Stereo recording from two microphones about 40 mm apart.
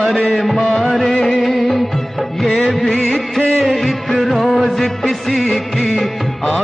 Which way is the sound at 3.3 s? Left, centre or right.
Centre.